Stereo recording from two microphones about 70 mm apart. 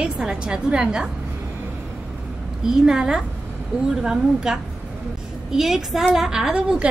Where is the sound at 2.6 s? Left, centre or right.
Centre.